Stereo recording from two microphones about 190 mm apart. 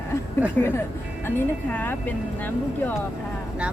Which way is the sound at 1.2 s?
10° left (ahead or behind).